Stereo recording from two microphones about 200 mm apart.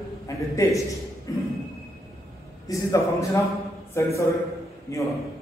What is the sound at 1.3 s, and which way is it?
Speech, 15° left (ahead or behind).